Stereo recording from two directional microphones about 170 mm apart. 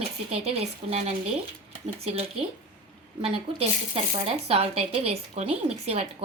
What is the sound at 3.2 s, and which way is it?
Speech, 35° right (ahead or behind).